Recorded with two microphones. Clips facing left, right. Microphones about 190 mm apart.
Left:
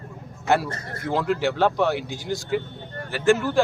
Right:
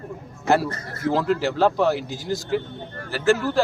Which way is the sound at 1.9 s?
40° right (ahead or behind).